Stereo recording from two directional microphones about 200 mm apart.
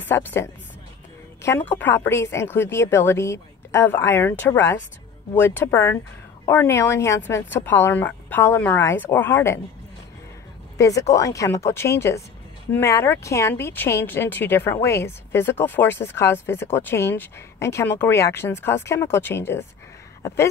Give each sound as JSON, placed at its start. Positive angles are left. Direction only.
{"t": 0.0, "sound": "speech", "side_deg": 10}
{"t": 10.8, "sound": "speech", "side_deg": 15}
{"t": 20.2, "sound": "a sound", "side_deg": 15}